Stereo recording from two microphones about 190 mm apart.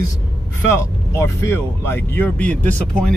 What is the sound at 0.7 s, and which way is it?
Speech, 15° left (ahead or behind).